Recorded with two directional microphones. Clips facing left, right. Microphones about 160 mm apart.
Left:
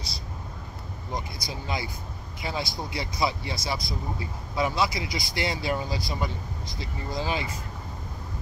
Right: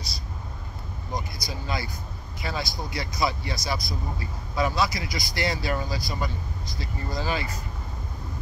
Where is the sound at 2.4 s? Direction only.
25° left (ahead or behind).